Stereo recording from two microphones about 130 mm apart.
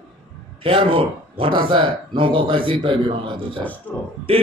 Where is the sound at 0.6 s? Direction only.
45° right (ahead or behind).